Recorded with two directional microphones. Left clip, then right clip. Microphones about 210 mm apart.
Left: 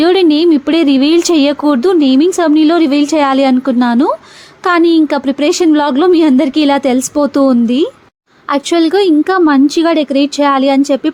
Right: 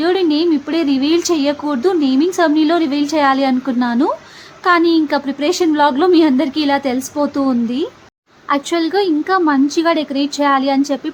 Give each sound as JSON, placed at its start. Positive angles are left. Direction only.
{"t": 0.0, "sound": "a woman's voice", "side_deg": 30}